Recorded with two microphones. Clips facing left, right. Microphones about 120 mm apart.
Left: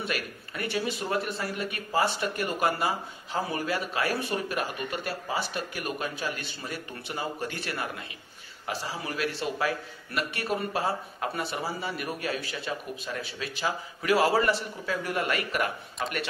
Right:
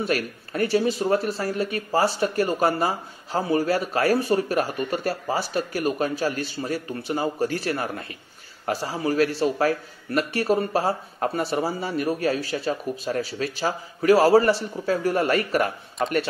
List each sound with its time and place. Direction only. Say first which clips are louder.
0.0 s speech: right 8 dB; 40° right (ahead or behind)